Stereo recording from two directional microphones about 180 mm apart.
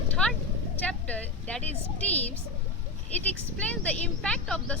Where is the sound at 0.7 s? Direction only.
10° left (ahead or behind).